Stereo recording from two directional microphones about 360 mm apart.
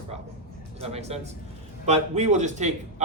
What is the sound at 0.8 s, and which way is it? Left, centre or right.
A man's voice, centre.